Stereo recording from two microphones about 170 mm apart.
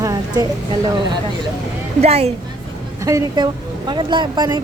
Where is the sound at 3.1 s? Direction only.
20° right (ahead or behind).